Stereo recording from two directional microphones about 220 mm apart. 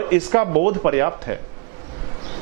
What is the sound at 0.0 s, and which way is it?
Speech, 15° right (ahead or behind).